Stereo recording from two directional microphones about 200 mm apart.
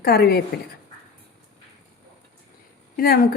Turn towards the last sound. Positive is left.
turn(degrees=50)  # may be behind; listen again after turning